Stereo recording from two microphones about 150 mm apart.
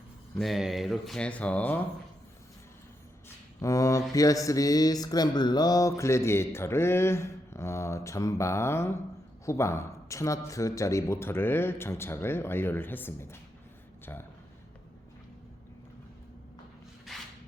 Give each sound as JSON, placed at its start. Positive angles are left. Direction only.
{"t": 0.3, "sound": "speech", "side_deg": 0}
{"t": 3.6, "sound": "speech", "side_deg": 20}
{"t": 17.1, "sound": "a sound", "side_deg": 0}